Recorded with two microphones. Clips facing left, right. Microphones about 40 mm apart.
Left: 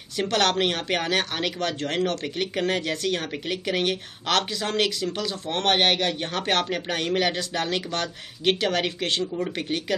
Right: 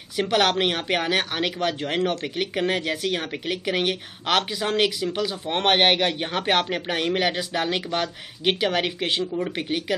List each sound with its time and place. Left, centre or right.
0.1 s speech: centre